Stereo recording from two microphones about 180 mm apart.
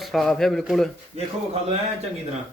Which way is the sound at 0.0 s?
Centre (ahead or behind).